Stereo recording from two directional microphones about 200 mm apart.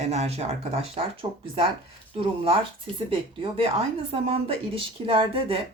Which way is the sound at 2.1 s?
25° right (ahead or behind).